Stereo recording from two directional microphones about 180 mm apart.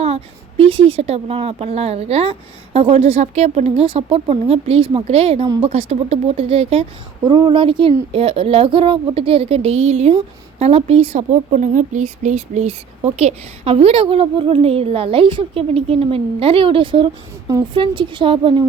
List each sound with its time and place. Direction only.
0.0 s speech: 35° right (ahead or behind)